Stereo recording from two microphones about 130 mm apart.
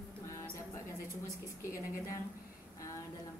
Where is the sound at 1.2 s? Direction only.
25° left (ahead or behind).